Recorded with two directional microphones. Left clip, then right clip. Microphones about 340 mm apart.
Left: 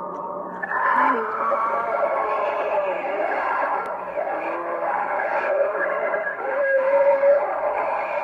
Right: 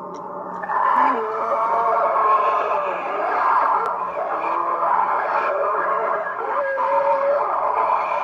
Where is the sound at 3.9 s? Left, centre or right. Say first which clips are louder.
Right 3 dB; right.